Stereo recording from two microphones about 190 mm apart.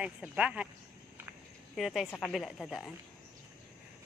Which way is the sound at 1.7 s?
Centre (ahead or behind).